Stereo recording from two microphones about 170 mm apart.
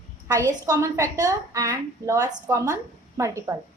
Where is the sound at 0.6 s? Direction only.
20° right (ahead or behind).